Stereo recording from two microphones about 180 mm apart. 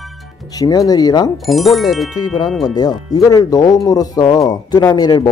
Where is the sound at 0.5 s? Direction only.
20° left (ahead or behind).